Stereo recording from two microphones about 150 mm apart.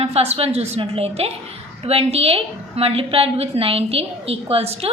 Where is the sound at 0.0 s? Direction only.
45° right (ahead or behind).